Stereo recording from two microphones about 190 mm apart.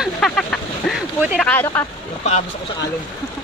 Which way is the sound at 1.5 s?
10° left (ahead or behind).